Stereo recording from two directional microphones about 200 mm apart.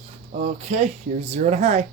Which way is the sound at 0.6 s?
35° right (ahead or behind).